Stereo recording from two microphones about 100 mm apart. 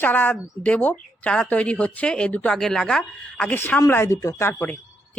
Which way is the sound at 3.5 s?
20° left (ahead or behind).